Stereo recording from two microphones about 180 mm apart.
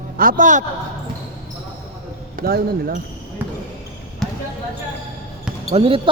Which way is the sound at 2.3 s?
55° right (ahead or behind).